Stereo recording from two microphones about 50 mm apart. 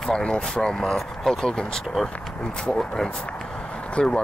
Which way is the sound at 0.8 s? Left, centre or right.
Centre.